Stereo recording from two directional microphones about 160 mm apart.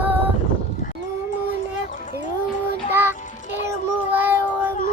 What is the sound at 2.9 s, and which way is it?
Music, 15° right (ahead or behind).